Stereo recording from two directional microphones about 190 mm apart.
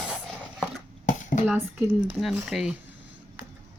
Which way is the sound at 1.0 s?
40° left (ahead or behind).